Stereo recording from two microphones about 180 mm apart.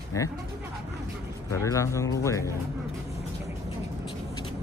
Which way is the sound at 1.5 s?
15° left (ahead or behind).